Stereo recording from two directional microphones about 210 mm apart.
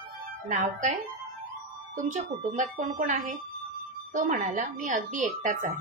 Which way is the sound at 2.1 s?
35° right (ahead or behind).